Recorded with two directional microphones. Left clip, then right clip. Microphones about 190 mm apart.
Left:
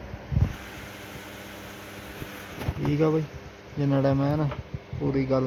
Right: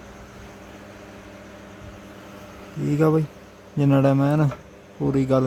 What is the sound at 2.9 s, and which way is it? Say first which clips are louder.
A man's voice: right 4 dB; 45° right (ahead or behind).